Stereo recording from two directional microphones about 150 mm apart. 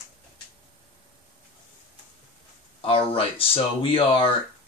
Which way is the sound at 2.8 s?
40° left (ahead or behind).